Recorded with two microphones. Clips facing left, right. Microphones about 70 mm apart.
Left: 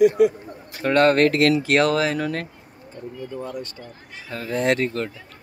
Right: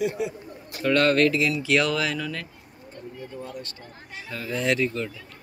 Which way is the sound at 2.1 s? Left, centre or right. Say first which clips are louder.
Left 6 dB; left.